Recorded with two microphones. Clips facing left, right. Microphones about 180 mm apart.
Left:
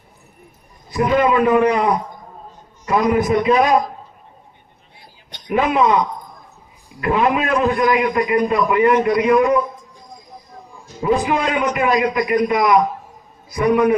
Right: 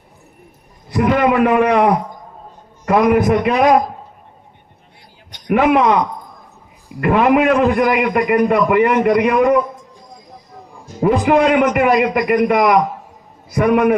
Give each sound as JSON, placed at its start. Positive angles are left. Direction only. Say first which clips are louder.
{"t": 0.9, "sound": "a man's voice", "louder": "right 2 dB", "side_deg": -70}
{"t": 5.5, "sound": "a man's voice", "louder": "right 3 dB", "side_deg": -70}
{"t": 11.0, "sound": "a man's voice", "louder": "right 5 dB", "side_deg": -65}